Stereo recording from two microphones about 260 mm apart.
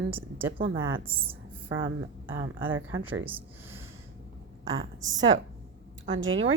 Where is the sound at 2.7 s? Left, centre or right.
Right.